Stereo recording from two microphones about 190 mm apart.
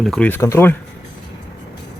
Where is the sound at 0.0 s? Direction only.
5° left (ahead or behind).